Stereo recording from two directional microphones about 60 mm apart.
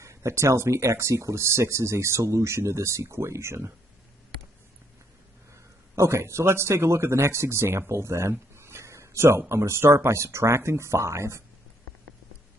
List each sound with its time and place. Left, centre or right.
0.0 s speech: right
5.9 s speech: right